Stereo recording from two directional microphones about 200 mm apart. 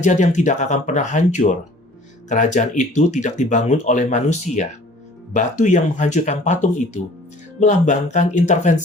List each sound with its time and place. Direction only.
0.0 s speech: 40° left (ahead or behind)